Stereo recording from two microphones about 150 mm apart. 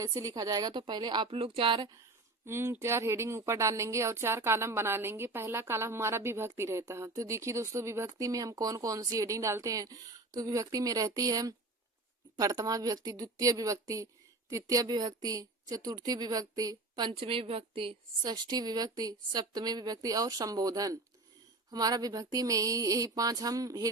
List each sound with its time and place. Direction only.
0.0 s a woman's voice: 25° right (ahead or behind)